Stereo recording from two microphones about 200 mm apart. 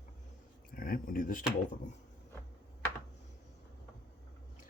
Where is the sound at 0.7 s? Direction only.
45° left (ahead or behind).